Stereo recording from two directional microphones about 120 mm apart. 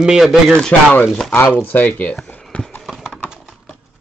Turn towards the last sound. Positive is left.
turn(degrees=5)  # may be behind; listen again after turning